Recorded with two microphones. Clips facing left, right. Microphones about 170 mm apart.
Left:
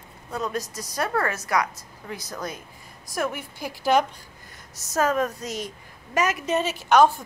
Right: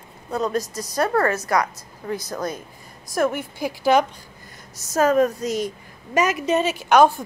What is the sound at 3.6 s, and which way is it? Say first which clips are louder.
Speech: right 3 dB; centre (ahead or behind).